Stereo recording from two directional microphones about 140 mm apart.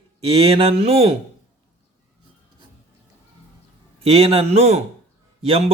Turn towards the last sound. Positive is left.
turn(degrees=-45)  # may be behind; listen again after turning